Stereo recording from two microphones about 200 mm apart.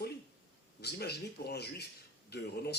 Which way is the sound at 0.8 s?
55° left (ahead or behind).